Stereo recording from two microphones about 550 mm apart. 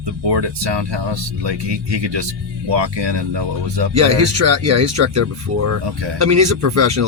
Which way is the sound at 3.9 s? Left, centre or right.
Right.